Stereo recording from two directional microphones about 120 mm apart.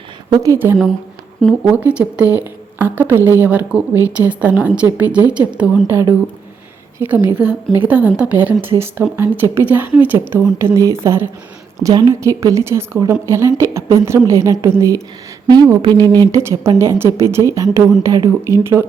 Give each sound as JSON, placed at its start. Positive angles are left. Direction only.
{"t": 0.4, "sound": "a woman's voice", "side_deg": -25}
{"t": 1.6, "sound": "a woman's voice", "side_deg": -10}
{"t": 7.0, "sound": "a woman's voice", "side_deg": -15}
{"t": 16.3, "sound": "a woman's voice", "side_deg": -25}